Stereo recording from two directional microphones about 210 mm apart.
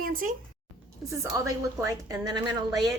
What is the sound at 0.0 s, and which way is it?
Speech, 40° right (ahead or behind).